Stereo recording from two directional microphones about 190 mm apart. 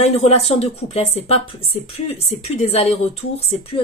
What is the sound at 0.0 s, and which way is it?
A woman's voice, 35° left (ahead or behind).